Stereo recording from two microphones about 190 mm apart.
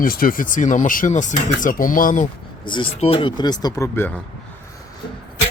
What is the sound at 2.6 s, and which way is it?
Speech, 25° left (ahead or behind).